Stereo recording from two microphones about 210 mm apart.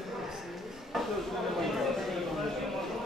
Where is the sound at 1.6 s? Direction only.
Centre (ahead or behind).